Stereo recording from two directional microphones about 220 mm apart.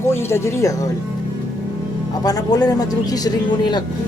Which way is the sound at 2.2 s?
15° left (ahead or behind).